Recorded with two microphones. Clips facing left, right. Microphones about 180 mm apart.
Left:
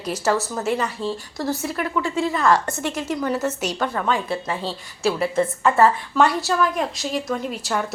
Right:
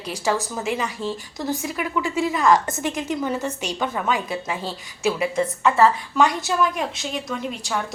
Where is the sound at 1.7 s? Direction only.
5° right (ahead or behind).